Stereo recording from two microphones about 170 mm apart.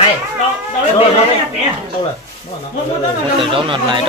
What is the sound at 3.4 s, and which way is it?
Speech, 30° right (ahead or behind).